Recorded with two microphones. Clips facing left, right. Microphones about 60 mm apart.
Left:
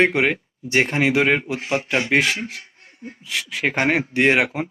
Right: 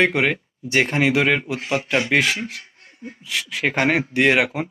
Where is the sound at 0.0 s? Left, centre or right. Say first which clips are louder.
Left 1 dB; left.